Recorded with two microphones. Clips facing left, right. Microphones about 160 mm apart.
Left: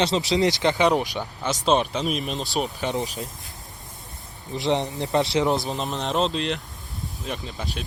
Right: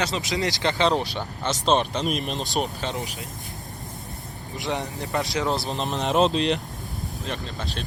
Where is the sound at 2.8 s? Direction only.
20° left (ahead or behind).